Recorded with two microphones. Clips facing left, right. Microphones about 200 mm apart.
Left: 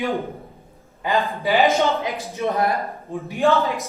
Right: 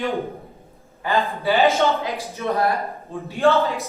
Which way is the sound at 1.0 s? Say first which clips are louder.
Even; 20° left (ahead or behind).